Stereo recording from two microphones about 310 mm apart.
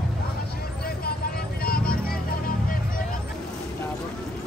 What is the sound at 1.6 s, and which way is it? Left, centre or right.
Vehicle, left.